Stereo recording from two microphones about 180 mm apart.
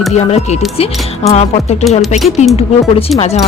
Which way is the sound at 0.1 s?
35° left (ahead or behind).